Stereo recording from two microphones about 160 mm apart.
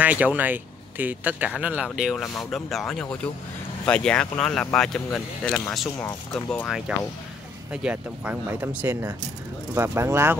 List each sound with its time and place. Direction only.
0.0 s speech: 10° right (ahead or behind)
7.7 s speech: 5° right (ahead or behind)